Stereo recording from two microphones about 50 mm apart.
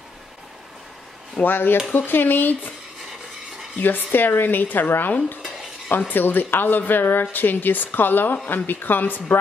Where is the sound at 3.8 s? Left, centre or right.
Left.